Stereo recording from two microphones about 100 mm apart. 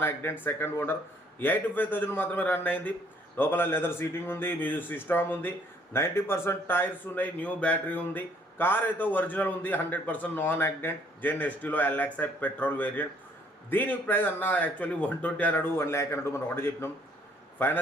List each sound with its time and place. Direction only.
0.0 s speech: 20° left (ahead or behind)